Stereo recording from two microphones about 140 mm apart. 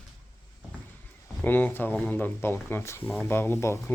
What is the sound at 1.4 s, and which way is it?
Speech, 15° left (ahead or behind).